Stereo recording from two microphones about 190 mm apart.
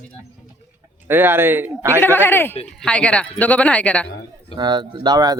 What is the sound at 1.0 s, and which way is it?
Speech, 10° right (ahead or behind).